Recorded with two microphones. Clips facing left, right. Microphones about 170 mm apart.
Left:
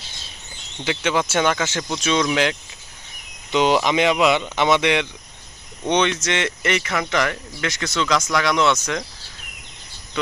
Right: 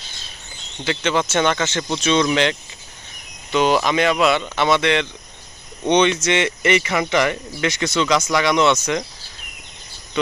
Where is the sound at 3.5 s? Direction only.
20° left (ahead or behind).